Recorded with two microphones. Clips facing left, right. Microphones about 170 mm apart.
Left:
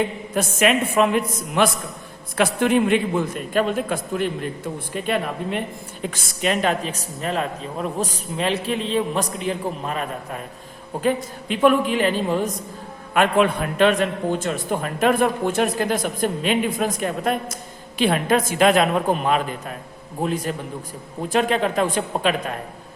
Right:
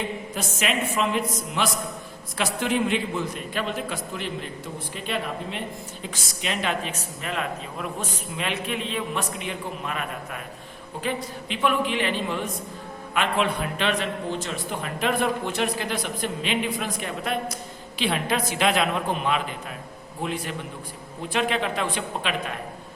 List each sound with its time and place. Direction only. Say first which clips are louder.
0.3 s a man's voice: left 9 dB; 55° left (ahead or behind); by 10.4 s 35° left (ahead or behind)
11.0 s a man's voice: left 7 dB; 45° left (ahead or behind)